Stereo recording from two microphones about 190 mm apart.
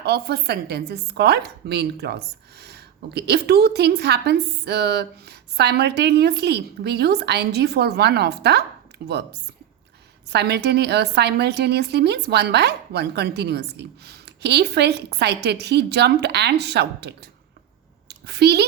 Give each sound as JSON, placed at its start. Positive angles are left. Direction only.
{"t": 0.0, "sound": "speech", "side_deg": -60}
{"t": 10.2, "sound": "a woman's voice", "side_deg": -60}